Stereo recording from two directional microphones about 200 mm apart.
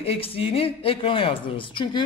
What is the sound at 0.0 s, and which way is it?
Speech, 30° left (ahead or behind).